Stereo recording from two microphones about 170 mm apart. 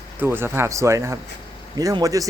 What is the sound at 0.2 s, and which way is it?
Speech, 15° right (ahead or behind).